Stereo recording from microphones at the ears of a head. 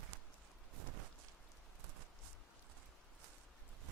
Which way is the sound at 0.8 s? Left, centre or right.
Right.